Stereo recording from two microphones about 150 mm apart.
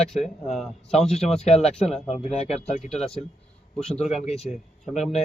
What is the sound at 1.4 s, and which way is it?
Speech, 45° left (ahead or behind).